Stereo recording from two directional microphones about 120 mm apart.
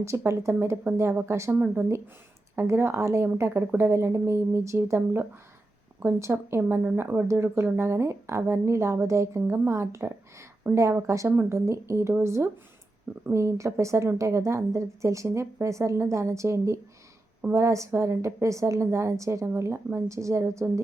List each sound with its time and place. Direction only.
0.0 s speech: 25° right (ahead or behind)